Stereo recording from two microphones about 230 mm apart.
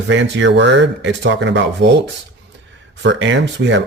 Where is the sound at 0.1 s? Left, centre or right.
Right.